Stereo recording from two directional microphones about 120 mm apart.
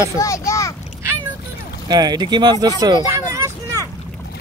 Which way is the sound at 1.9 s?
35° right (ahead or behind).